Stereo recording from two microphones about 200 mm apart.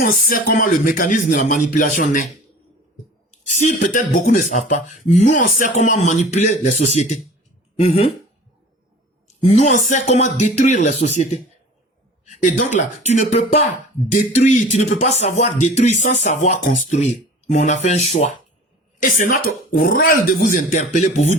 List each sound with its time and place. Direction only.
0.0 s speech: 45° left (ahead or behind)
3.5 s speech: 35° left (ahead or behind)
9.2 s speech: 30° left (ahead or behind)